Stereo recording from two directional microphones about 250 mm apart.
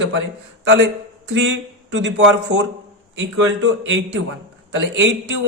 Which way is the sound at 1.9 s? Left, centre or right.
Right.